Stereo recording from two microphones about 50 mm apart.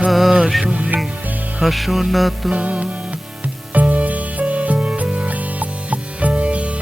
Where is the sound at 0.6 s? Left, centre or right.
Right.